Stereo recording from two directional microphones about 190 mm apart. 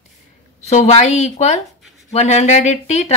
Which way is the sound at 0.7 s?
35° left (ahead or behind).